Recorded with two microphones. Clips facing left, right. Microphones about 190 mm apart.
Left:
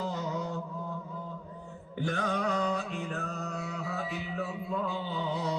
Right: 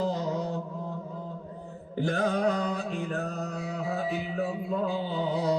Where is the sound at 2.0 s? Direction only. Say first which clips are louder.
Right 5 dB; 35° right (ahead or behind).